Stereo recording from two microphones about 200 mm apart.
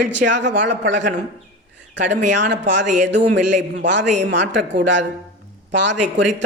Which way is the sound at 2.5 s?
65° right (ahead or behind).